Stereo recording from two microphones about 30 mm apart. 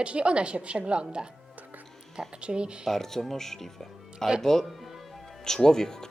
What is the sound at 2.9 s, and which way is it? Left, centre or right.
Speech, centre.